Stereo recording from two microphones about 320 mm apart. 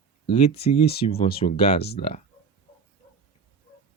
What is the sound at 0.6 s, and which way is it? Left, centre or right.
Speech, centre.